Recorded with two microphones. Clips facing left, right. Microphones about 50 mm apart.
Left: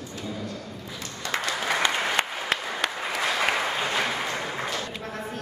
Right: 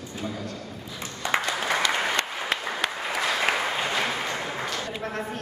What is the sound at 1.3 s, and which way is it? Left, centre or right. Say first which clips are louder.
Applause: right 3 dB; right.